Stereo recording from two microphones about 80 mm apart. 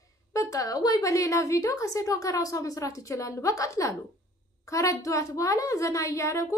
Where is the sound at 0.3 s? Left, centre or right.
Left.